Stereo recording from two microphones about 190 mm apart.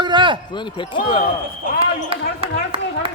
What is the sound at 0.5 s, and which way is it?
Speech, 25° left (ahead or behind).